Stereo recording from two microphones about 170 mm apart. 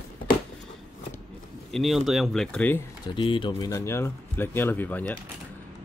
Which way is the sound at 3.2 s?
30° left (ahead or behind).